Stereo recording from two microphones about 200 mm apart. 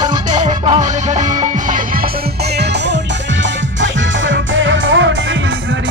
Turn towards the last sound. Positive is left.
turn(degrees=-70)  # may be behind; listen again after turning